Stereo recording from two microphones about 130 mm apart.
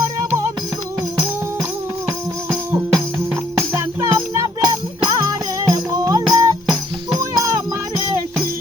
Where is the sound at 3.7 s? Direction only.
20° right (ahead or behind).